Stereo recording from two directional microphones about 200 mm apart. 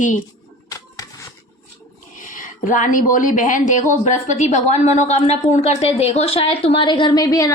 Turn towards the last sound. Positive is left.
turn(degrees=20)  # may be behind; listen again after turning